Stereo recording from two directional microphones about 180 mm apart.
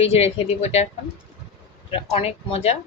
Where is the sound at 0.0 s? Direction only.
35° left (ahead or behind).